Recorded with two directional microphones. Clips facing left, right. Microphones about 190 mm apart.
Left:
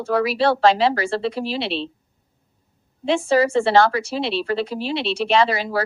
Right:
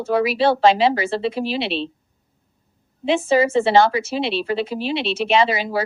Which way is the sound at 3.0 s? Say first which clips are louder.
Right 1 dB; 5° right (ahead or behind).